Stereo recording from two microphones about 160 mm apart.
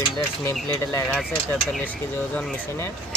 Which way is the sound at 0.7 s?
15° left (ahead or behind).